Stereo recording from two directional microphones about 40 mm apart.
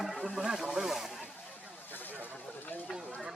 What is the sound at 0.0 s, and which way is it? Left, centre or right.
Speech, centre.